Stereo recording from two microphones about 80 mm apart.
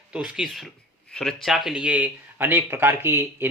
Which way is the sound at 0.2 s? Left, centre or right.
Centre.